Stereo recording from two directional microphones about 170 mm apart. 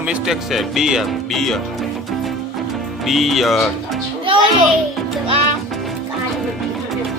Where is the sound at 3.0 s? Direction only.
Centre (ahead or behind).